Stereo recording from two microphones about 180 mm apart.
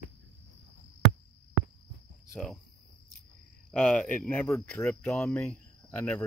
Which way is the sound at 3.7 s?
5° left (ahead or behind).